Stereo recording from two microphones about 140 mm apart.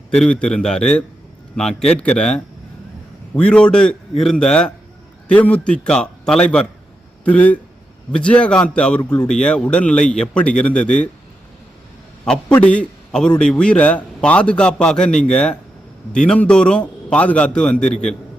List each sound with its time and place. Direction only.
0.2 s a man's voice: 5° left (ahead or behind)
12.2 s a man's voice: 5° left (ahead or behind)